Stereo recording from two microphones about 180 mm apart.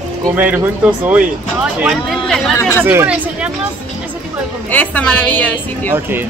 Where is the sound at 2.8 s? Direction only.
10° right (ahead or behind).